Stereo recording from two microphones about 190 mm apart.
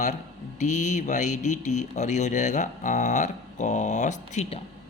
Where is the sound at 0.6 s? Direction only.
40° left (ahead or behind).